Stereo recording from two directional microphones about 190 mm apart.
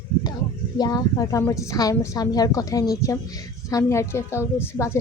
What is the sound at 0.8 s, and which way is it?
A woman's voice, 20° left (ahead or behind).